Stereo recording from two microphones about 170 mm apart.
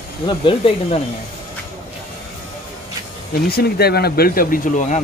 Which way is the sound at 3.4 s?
70° left (ahead or behind).